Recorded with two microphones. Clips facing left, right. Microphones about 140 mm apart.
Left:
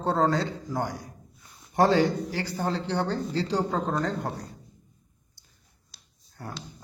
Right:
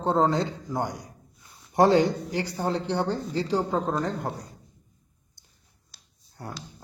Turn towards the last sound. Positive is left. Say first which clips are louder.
# right 1 dB
turn(degrees=-25)  # may be behind; listen again after turning